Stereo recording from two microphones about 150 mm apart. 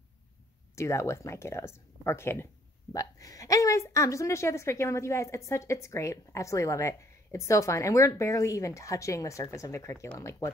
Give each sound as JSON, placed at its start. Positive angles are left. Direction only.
{"t": 0.7, "sound": "a woman's voice", "side_deg": 20}